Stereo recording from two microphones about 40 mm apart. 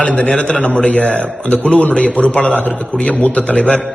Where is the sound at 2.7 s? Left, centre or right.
Left.